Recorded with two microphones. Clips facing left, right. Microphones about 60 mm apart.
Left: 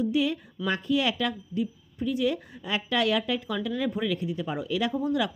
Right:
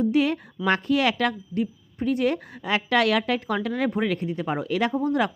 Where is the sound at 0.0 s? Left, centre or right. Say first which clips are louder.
Right 4 dB; right.